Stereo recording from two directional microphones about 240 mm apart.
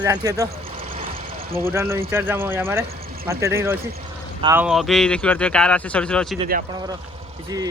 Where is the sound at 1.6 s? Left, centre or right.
Centre.